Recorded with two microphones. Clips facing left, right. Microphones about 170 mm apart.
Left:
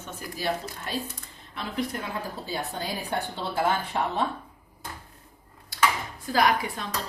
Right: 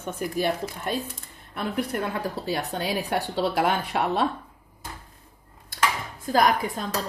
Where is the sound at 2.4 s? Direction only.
75° right (ahead or behind).